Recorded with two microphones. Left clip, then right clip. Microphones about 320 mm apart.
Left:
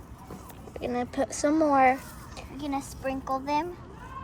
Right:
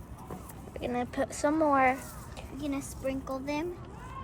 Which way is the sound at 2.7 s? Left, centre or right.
Left.